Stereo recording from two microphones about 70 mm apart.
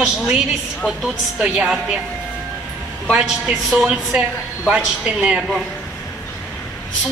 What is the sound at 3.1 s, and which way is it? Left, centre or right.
A woman's voice, centre.